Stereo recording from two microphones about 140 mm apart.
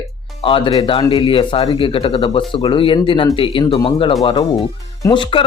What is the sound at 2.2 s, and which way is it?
A man's voice, 30° left (ahead or behind).